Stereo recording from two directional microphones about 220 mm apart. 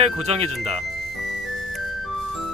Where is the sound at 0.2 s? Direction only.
30° right (ahead or behind).